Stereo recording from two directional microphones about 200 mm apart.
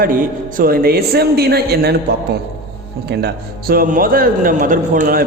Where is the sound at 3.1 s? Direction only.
55° right (ahead or behind).